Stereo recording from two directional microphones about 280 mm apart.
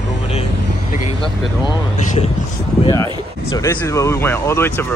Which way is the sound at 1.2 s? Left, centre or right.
Centre.